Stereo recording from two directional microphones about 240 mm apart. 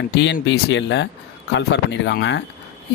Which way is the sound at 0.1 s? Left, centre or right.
Left.